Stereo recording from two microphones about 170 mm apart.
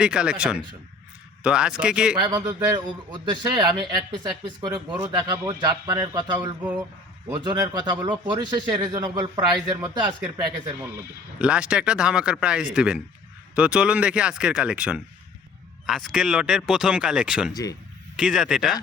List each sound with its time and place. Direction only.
0.0 s speech: 5° right (ahead or behind)
2.1 s speech: 25° right (ahead or behind)
11.3 s speech: 5° right (ahead or behind)
17.5 s speech: 20° left (ahead or behind)
18.2 s speech: 5° right (ahead or behind)